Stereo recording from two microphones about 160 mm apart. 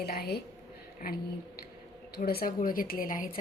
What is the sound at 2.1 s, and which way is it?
A woman's voice, 75° left (ahead or behind).